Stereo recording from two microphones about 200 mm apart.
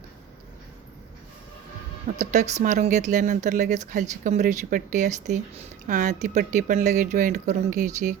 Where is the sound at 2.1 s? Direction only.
35° right (ahead or behind).